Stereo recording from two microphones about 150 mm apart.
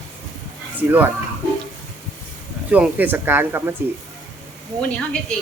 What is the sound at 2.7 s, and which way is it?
A woman's voice, 10° right (ahead or behind).